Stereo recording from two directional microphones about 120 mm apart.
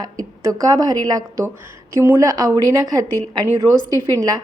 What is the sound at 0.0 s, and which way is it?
A woman's voice, 30° right (ahead or behind).